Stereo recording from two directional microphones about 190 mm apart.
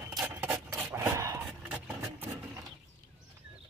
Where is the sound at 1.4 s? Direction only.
10° right (ahead or behind).